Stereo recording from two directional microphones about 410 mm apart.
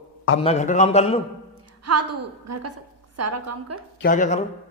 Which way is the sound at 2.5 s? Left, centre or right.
Right.